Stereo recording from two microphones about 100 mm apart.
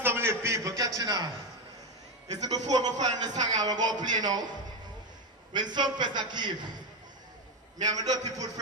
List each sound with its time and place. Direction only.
0.0 s a man's voice: 25° right (ahead or behind); by 1.3 s 40° right (ahead or behind)
2.3 s a man's voice: 40° right (ahead or behind)
7.8 s a man's voice: 40° right (ahead or behind)